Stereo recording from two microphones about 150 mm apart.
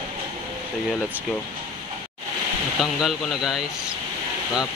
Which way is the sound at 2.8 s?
Centre (ahead or behind).